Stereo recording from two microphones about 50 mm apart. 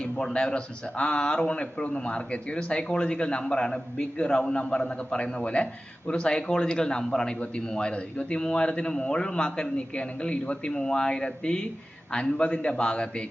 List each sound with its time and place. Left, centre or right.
0.0 s a man's voice: centre
10.7 s a man's voice: centre